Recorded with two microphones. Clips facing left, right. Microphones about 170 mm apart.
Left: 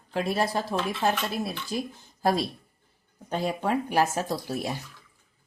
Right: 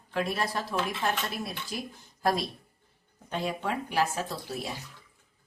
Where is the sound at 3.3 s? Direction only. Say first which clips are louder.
Left 5 dB; 45° left (ahead or behind).